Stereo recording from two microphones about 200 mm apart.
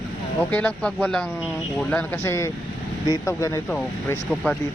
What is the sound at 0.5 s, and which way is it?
Speech, 5° left (ahead or behind).